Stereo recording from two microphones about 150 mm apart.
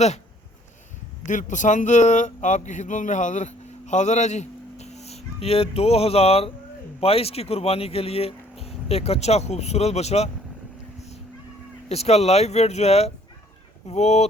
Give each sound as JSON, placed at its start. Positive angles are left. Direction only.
{"t": 1.2, "sound": "speech", "side_deg": 55}
{"t": 11.9, "sound": "speech", "side_deg": 45}